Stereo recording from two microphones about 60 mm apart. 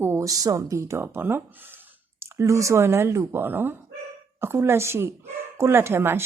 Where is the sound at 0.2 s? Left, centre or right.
Right.